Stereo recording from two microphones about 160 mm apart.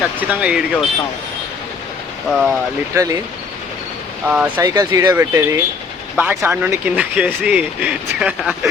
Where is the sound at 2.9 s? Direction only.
20° right (ahead or behind).